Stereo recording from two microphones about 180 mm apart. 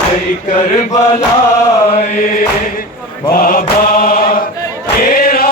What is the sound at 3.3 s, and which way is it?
Mantra, 50° left (ahead or behind).